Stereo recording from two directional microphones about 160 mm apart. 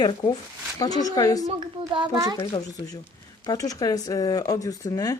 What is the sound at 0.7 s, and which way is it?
Speech, 25° left (ahead or behind).